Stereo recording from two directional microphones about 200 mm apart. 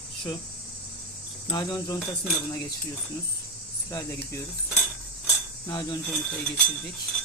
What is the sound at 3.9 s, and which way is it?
Speech, 15° left (ahead or behind).